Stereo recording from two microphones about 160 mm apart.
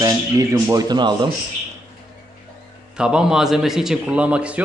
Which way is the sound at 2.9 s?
5° right (ahead or behind).